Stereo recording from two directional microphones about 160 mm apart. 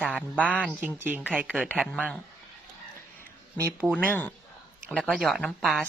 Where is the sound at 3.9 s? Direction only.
10° left (ahead or behind).